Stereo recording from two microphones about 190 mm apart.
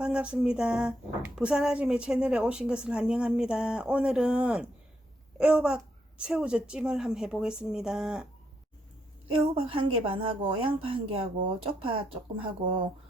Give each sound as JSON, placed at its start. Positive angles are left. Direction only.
{"t": 0.0, "sound": "speech", "side_deg": -5}
{"t": 9.4, "sound": "speech", "side_deg": -30}